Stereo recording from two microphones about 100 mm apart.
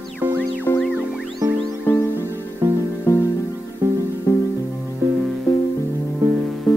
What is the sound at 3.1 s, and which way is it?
Music, 25° left (ahead or behind).